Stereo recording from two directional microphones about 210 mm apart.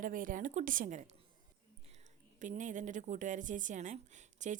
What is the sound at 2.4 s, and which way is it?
A woman's voice, 35° right (ahead or behind).